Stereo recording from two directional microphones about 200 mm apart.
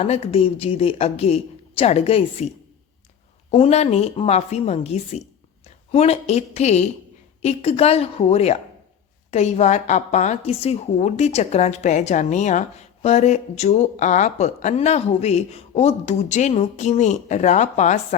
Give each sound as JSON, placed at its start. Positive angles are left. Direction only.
{"t": 0.0, "sound": "a woman's voice", "side_deg": 30}
{"t": 3.5, "sound": "a woman's voice", "side_deg": 30}